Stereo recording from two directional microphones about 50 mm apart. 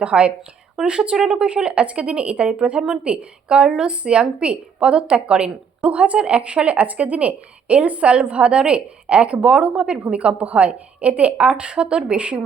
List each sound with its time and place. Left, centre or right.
0.0 s speech: right